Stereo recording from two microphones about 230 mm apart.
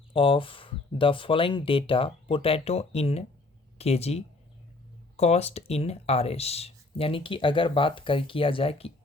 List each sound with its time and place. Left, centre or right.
0.1 s speech: left